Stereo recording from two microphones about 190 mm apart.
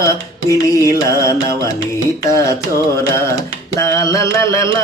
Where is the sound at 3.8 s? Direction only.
15° left (ahead or behind).